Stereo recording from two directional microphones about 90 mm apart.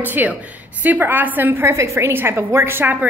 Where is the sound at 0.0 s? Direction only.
20° right (ahead or behind).